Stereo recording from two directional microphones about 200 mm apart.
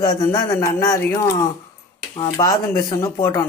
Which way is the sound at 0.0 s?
15° left (ahead or behind).